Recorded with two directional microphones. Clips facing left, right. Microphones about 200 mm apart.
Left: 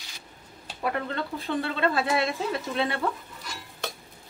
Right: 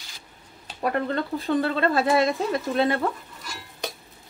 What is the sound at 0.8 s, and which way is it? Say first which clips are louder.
Speech: right 4 dB; 40° right (ahead or behind).